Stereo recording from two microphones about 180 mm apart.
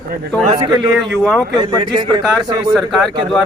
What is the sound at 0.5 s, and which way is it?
Speech, 25° right (ahead or behind).